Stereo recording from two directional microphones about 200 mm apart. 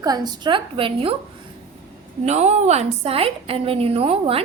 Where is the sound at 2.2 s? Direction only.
35° right (ahead or behind).